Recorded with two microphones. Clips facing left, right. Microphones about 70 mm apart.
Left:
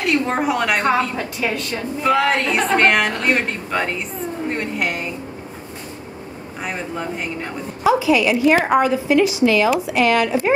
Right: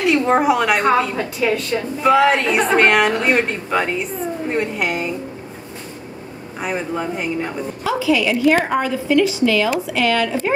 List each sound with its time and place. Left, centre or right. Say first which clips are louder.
0.1 s a woman's voice: right 3 dB; centre
6.6 s a woman's voice: right 4 dB; centre
7.8 s a woman's voice: left 3 dB; left